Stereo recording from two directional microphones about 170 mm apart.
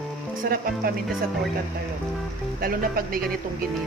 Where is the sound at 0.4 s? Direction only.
60° right (ahead or behind).